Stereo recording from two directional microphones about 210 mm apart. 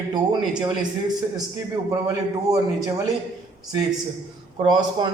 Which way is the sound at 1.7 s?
15° right (ahead or behind).